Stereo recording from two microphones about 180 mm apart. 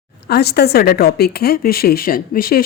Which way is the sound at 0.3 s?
65° left (ahead or behind).